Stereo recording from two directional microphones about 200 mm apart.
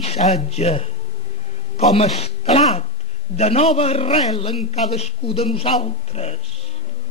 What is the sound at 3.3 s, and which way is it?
A man's voice, 30° left (ahead or behind).